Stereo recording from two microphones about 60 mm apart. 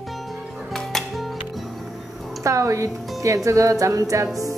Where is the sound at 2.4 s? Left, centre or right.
Right.